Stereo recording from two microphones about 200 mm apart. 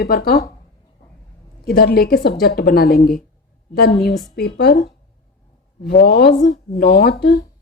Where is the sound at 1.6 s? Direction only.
50° left (ahead or behind).